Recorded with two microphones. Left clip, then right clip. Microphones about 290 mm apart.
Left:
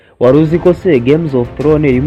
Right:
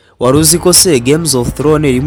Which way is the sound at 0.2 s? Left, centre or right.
Right.